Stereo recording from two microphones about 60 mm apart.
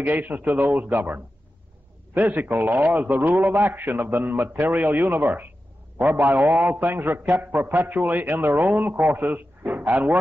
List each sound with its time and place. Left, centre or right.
0.0 s a man's voice: right